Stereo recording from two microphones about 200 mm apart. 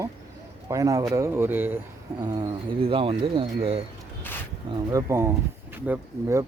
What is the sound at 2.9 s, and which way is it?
Speech, 25° right (ahead or behind).